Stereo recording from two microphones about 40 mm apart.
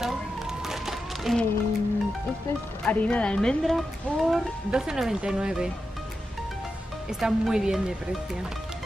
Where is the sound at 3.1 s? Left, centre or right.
Left.